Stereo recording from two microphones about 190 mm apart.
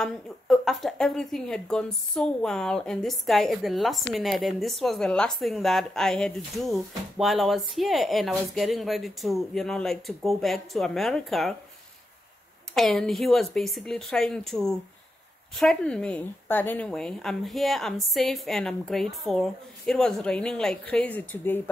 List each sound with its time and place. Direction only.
0.0 s speech: centre (ahead or behind)
12.7 s speech: centre (ahead or behind)